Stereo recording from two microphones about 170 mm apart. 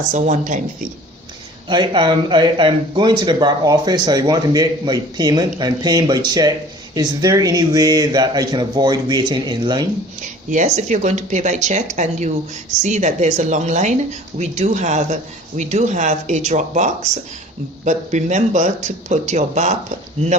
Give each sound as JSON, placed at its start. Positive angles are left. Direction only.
{"t": 0.1, "sound": "a woman's voice", "side_deg": -45}
{"t": 1.6, "sound": "speech", "side_deg": -25}
{"t": 10.2, "sound": "a woman's voice", "side_deg": -45}